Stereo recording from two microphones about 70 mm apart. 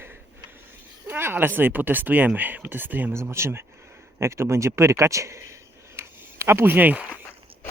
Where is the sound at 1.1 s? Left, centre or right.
Right.